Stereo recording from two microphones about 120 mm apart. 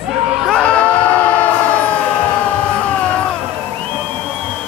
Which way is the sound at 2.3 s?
10° left (ahead or behind).